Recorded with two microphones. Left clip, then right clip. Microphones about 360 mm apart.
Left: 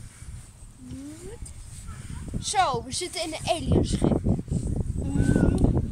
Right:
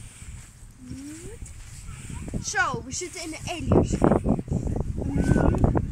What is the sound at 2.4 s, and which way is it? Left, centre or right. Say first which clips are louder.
Speech: left 2 dB; centre.